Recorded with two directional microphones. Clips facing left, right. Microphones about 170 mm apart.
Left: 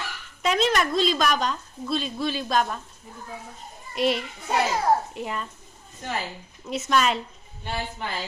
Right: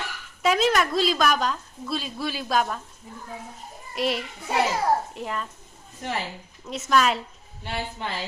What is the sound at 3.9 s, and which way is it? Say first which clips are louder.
A child's voice: left 2 dB; centre (ahead or behind).